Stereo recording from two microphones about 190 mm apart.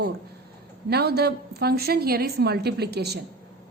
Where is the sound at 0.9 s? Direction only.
55° right (ahead or behind).